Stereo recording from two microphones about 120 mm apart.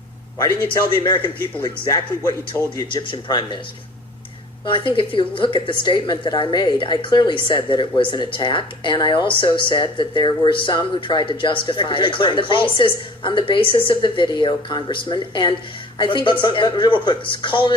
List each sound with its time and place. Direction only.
0.9 s a woman's voice: 40° left (ahead or behind)
2.9 s speech: 40° left (ahead or behind)
4.6 s a woman's voice: 45° left (ahead or behind)